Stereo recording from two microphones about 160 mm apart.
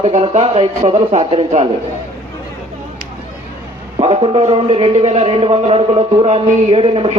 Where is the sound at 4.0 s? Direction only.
35° right (ahead or behind).